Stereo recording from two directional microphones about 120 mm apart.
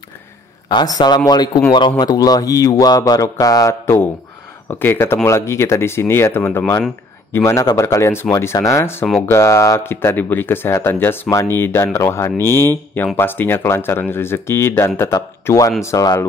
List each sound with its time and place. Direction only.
0.7 s speech: 35° left (ahead or behind)